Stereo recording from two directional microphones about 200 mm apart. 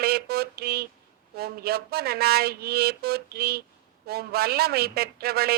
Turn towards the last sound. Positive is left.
turn(degrees=-50)  # may be behind; listen again after turning